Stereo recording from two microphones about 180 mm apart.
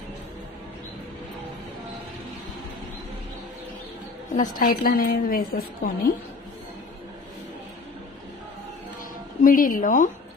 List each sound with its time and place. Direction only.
4.4 s a woman's voice: 55° left (ahead or behind)
9.4 s a woman's voice: 50° left (ahead or behind)